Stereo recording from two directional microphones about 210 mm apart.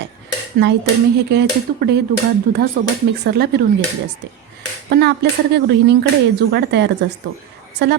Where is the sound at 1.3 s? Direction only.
50° right (ahead or behind).